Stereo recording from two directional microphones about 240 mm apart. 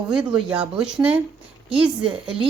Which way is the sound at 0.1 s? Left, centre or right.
Centre.